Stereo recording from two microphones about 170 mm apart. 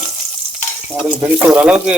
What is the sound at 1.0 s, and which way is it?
Speech, 5° right (ahead or behind).